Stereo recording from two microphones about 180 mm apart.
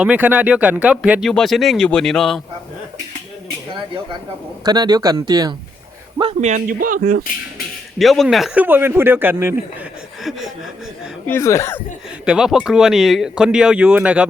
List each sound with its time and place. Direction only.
0.0 s speech: 10° right (ahead or behind)
4.6 s speech: 20° right (ahead or behind)
6.4 s speech: 45° right (ahead or behind)
7.9 s speech: centre (ahead or behind)
10.2 s chuckle: centre (ahead or behind)
11.3 s speech: 15° left (ahead or behind)
12.2 s speech: 5° right (ahead or behind)